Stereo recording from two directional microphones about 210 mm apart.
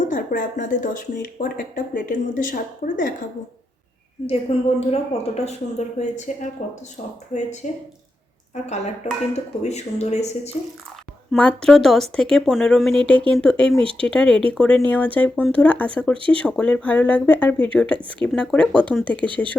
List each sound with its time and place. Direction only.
0.1 s speech: 40° left (ahead or behind)
4.5 s speech: 30° left (ahead or behind)
11.3 s speech: 5° left (ahead or behind)